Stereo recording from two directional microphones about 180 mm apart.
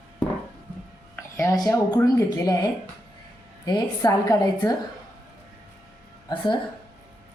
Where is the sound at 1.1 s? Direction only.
15° left (ahead or behind).